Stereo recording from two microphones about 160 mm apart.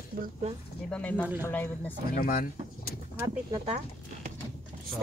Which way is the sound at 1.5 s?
10° left (ahead or behind).